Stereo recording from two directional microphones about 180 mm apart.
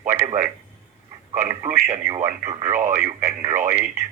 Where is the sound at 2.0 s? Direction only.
20° right (ahead or behind).